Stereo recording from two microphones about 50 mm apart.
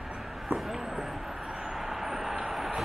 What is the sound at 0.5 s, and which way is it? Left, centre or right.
Vehicle, centre.